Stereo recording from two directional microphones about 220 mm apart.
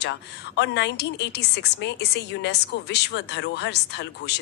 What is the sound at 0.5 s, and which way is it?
A woman's voice, 50° left (ahead or behind).